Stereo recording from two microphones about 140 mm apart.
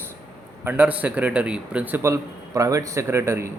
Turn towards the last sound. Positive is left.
turn(degrees=-20)  # may be behind; listen again after turning